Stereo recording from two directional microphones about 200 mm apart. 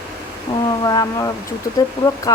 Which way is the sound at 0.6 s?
20° left (ahead or behind).